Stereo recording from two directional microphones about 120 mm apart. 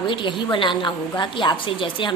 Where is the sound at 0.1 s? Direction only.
45° left (ahead or behind).